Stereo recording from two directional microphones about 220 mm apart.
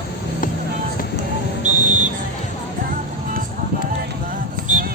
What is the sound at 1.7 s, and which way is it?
Music, 35° right (ahead or behind).